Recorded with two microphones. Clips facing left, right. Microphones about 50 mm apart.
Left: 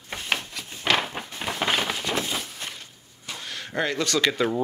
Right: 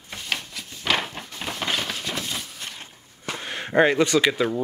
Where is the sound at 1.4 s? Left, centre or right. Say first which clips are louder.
Left 2 dB; centre.